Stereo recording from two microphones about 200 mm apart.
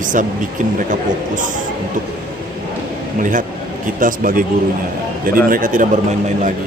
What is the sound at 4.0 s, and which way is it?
Speech, 45° right (ahead or behind).